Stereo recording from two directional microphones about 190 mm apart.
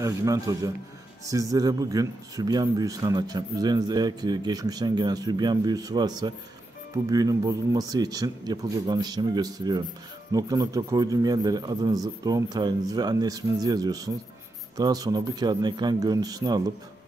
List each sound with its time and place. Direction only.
0.0 s speech: 20° right (ahead or behind)